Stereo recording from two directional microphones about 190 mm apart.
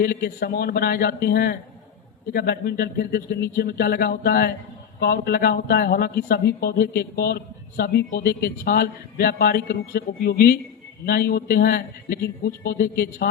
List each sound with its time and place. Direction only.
0.0 s a man's voice: 55° left (ahead or behind)